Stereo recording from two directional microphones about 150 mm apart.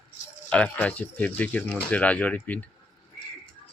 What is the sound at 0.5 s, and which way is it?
Speech, 10° left (ahead or behind).